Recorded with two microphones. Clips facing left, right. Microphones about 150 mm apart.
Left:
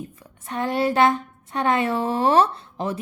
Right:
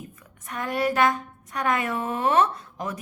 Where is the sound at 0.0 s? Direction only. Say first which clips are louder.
Left 5 dB; 30° left (ahead or behind).